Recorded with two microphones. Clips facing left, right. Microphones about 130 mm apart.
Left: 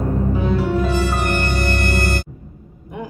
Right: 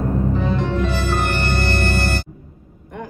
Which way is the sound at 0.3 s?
5° left (ahead or behind).